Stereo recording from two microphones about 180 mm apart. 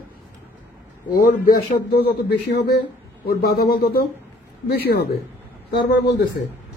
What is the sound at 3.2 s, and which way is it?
A man's voice, 60° left (ahead or behind).